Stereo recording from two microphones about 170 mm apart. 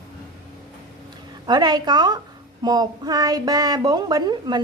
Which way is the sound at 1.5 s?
25° right (ahead or behind).